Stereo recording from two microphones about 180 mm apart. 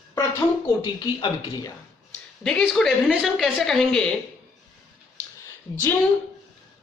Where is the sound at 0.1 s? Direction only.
15° left (ahead or behind).